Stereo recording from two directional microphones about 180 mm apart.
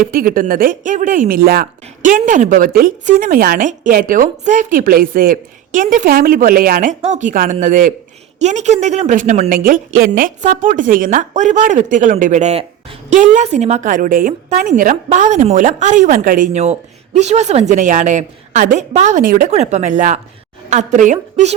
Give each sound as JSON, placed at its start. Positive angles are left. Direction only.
{"t": 0.0, "sound": "speech", "side_deg": -55}
{"t": 7.0, "sound": "speech", "side_deg": -40}
{"t": 19.5, "sound": "speech", "side_deg": -40}